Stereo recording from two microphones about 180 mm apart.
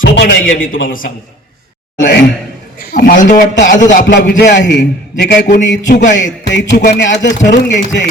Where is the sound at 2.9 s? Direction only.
50° left (ahead or behind).